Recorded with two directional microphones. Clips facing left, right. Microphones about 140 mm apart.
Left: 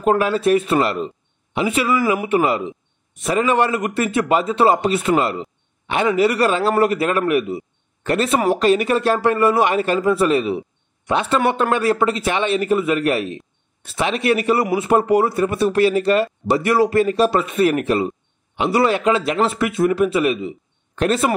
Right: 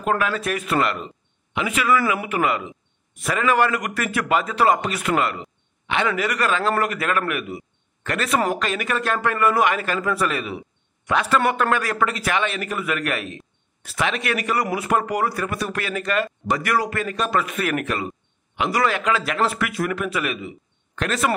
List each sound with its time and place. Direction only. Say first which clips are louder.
0.2 s a man's voice: left 8 dB; 30° left (ahead or behind)